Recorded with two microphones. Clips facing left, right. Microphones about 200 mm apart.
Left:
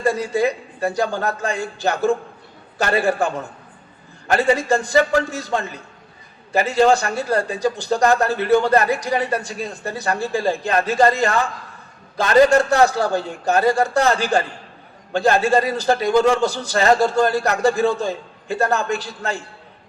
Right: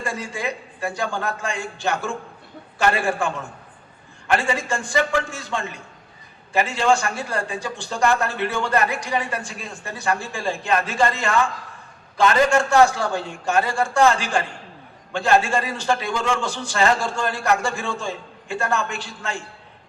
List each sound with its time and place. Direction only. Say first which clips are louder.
0.0 s a man's voice: left 9 dB; 40° left (ahead or behind)